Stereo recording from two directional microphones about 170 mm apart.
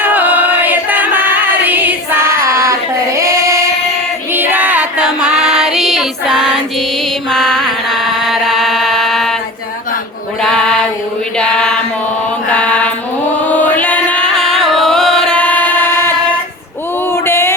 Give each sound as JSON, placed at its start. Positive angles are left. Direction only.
{"t": 0.0, "sound": "music", "side_deg": -10}
{"t": 2.4, "sound": "child singing", "side_deg": -20}
{"t": 4.3, "sound": "music", "side_deg": -10}
{"t": 8.2, "sound": "chant", "side_deg": 0}
{"t": 11.3, "sound": "a sound", "side_deg": 5}
{"t": 12.5, "sound": "mantra", "side_deg": 5}
{"t": 13.5, "sound": "chant", "side_deg": 10}
{"t": 17.1, "sound": "a sound", "side_deg": 15}